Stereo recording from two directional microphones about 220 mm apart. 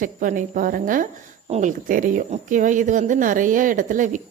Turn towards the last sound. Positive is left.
turn(degrees=-35)  # may be behind; listen again after turning